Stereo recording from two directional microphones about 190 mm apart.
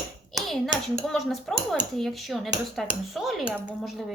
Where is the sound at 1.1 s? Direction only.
Centre (ahead or behind).